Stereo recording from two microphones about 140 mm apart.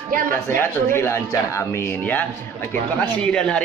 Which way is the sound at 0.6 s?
15° left (ahead or behind).